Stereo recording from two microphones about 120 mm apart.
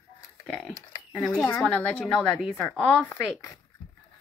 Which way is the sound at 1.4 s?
15° left (ahead or behind).